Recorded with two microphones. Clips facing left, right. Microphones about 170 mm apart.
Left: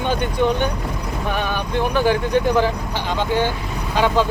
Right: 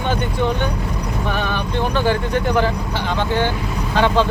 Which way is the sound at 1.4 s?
15° left (ahead or behind).